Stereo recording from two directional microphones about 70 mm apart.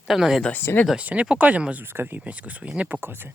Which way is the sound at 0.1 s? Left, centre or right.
Centre.